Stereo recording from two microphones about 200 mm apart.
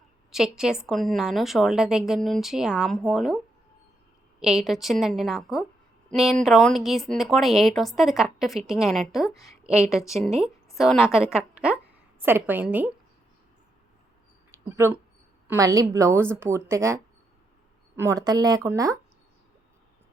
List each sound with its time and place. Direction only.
0.3 s speech: centre (ahead or behind)
4.4 s speech: centre (ahead or behind)
9.3 s a woman's voice: 15° left (ahead or behind)
9.6 s a woman's voice: 5° right (ahead or behind)
14.5 s a woman's voice: 15° right (ahead or behind)